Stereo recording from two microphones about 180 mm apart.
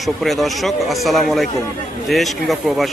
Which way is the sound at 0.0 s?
Centre (ahead or behind).